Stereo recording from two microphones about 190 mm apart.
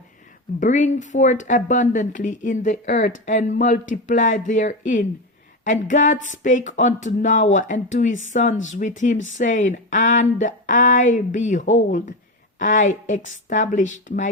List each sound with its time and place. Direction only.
0.6 s a woman's voice: 40° left (ahead or behind)